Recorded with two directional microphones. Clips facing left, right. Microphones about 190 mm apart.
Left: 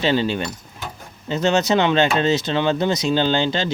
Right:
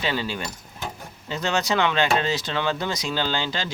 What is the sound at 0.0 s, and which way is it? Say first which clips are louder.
Speech: left 7 dB; 25° left (ahead or behind).